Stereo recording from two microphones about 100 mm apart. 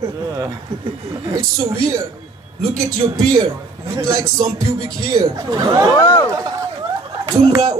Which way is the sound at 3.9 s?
35° right (ahead or behind).